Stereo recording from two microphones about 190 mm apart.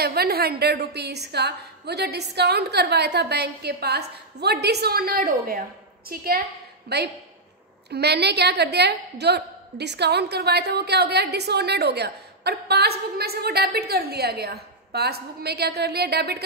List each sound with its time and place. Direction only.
0.0 s a woman's voice: 55° right (ahead or behind)